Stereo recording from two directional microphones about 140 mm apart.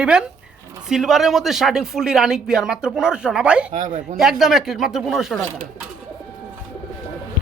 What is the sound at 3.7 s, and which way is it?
Speech, 60° right (ahead or behind).